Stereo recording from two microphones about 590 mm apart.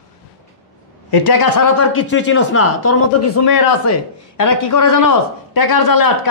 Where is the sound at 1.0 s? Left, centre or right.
Left.